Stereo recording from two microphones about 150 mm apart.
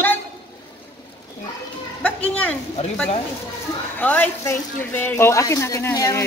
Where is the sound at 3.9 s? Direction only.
10° left (ahead or behind).